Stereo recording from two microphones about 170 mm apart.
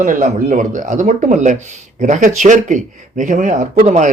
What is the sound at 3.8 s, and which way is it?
Speech, 40° right (ahead or behind).